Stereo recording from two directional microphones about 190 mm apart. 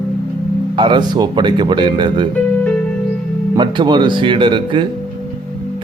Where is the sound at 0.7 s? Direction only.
25° right (ahead or behind).